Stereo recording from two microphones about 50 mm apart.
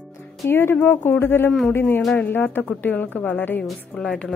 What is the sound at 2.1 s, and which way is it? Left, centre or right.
A woman's voice, left.